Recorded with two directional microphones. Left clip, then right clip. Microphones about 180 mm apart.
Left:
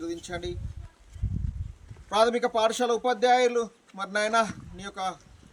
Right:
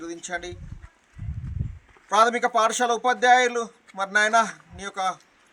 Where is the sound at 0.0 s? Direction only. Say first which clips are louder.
Right 2 dB; 10° left (ahead or behind).